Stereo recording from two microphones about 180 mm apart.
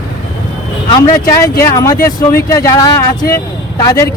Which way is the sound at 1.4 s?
15° left (ahead or behind).